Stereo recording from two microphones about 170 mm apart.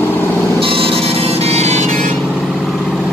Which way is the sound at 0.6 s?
35° right (ahead or behind).